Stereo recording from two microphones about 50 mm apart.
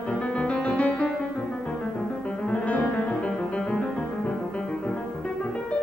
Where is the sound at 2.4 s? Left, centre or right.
Left.